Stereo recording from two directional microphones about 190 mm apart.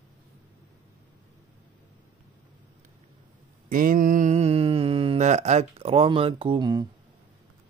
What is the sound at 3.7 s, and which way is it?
Mantra, 45° right (ahead or behind).